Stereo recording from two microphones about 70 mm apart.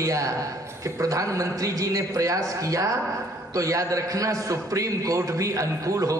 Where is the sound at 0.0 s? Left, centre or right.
Right.